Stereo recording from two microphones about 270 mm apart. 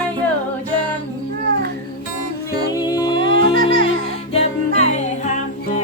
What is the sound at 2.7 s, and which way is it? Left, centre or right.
Music, centre.